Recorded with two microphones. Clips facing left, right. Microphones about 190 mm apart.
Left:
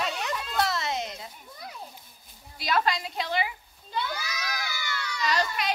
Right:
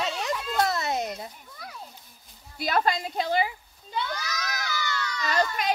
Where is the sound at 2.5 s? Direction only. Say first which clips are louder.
Right 2 dB; 45° right (ahead or behind).